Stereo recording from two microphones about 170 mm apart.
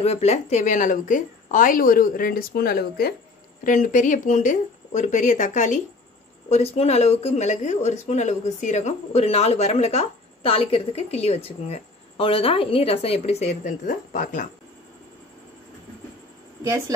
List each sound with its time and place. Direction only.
0.0 s a woman's voice: 40° left (ahead or behind); by 3.2 s 65° left (ahead or behind)
3.6 s a woman's voice: 50° left (ahead or behind)
16.6 s speech: 20° right (ahead or behind)